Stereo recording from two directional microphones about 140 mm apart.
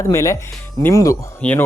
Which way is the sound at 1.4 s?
10° left (ahead or behind).